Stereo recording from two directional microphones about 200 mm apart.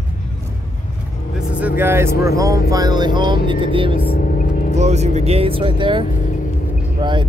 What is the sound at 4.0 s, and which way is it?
Music, 50° left (ahead or behind).